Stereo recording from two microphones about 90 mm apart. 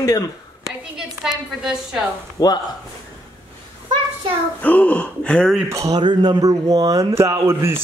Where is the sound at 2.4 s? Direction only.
40° left (ahead or behind).